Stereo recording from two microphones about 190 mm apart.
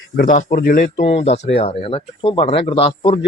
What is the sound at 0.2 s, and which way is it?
Speech, 40° left (ahead or behind).